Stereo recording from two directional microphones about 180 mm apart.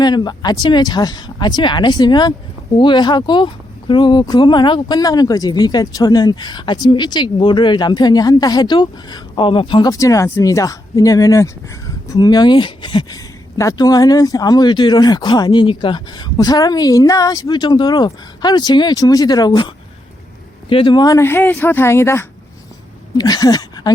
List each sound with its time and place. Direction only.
0.0 s speech: 25° left (ahead or behind)